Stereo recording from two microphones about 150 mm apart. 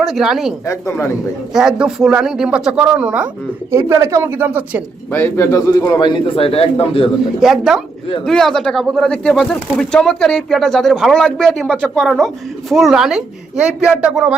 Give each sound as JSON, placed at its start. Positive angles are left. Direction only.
{"t": 0.0, "sound": "speech", "side_deg": 0}
{"t": 1.5, "sound": "speech", "side_deg": -5}
{"t": 5.1, "sound": "speech", "side_deg": 15}
{"t": 7.3, "sound": "speech", "side_deg": 0}